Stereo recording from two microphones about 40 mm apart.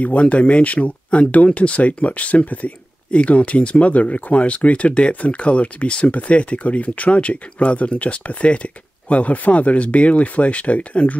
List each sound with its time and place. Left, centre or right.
0.0 s speech: left